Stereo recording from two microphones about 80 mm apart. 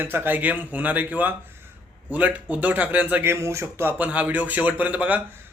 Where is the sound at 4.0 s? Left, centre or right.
Centre.